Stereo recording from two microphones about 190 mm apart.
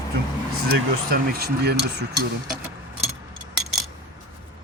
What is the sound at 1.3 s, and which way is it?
Speech, 55° right (ahead or behind).